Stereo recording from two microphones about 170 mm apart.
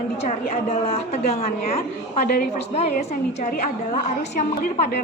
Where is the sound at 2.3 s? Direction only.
60° left (ahead or behind).